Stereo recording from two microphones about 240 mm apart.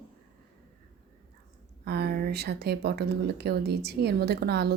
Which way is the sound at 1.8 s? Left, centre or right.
Right.